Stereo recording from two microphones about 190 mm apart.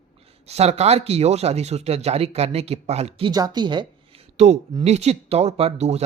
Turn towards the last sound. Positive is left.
turn(degrees=-35)  # may be behind; listen again after turning